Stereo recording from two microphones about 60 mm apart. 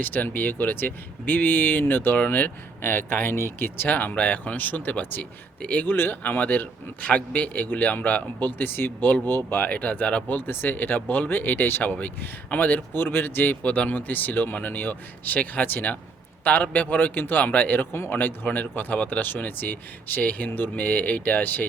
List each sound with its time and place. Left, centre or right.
0.0 s a man's voice: left
10.3 s a man's voice: left